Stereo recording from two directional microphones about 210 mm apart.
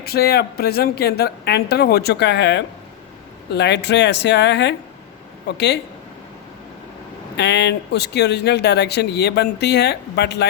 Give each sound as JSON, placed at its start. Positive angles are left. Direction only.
{"t": 0.0, "sound": "speech", "side_deg": 50}
{"t": 7.3, "sound": "speech", "side_deg": 55}